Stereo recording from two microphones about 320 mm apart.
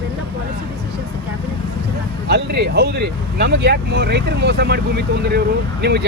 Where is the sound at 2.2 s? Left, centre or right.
Right.